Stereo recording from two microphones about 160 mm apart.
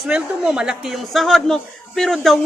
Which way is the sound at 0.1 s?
5° right (ahead or behind).